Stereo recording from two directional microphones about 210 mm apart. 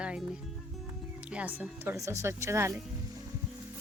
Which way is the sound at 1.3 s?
5° right (ahead or behind).